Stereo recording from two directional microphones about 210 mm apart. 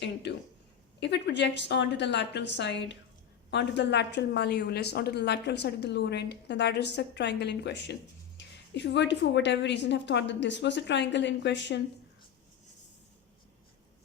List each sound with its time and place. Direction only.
0.0 s a woman's voice: 55° left (ahead or behind)